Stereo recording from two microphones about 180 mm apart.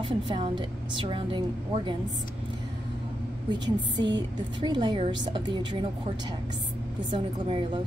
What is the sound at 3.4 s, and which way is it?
A woman's voice, 25° right (ahead or behind).